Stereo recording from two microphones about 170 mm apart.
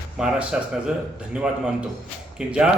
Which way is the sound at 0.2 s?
5° right (ahead or behind).